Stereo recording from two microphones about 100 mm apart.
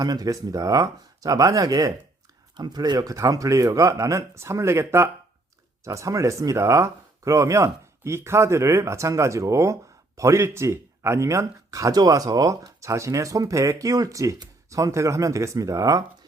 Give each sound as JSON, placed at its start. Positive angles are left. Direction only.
{"t": 0.0, "sound": "speech", "side_deg": -40}